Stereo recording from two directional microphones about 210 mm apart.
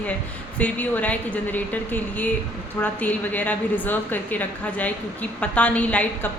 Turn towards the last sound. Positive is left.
turn(degrees=5)  # may be behind; listen again after turning